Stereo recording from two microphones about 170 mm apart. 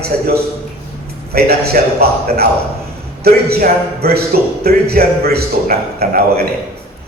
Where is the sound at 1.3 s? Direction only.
65° right (ahead or behind).